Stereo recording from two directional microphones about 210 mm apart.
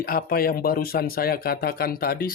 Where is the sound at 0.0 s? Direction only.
45° left (ahead or behind).